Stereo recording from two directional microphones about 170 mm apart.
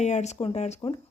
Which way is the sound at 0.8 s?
25° left (ahead or behind).